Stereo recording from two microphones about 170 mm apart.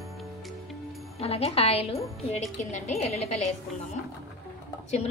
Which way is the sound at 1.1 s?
35° left (ahead or behind).